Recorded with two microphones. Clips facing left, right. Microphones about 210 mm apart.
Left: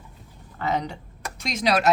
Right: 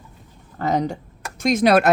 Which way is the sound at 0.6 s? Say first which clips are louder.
Right 5 dB; 40° right (ahead or behind).